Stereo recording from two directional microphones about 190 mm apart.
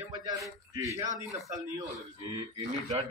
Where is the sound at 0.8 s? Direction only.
15° right (ahead or behind).